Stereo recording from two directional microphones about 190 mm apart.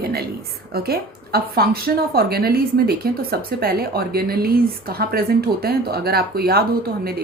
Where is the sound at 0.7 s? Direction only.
55° right (ahead or behind).